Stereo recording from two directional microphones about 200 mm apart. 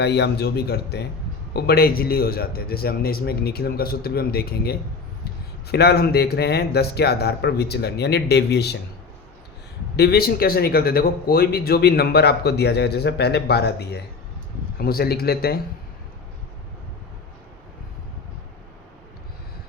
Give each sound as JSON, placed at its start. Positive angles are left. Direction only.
{"t": 0.0, "sound": "a man's voice", "side_deg": 55}
{"t": 9.9, "sound": "a man's voice", "side_deg": 55}